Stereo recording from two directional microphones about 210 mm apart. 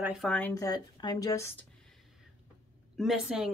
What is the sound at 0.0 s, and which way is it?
A woman's voice, centre (ahead or behind).